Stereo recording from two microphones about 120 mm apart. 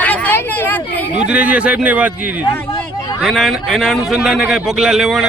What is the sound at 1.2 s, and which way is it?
Speech, 10° right (ahead or behind).